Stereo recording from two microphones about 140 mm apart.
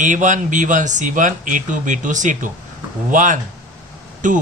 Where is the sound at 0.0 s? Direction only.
65° right (ahead or behind).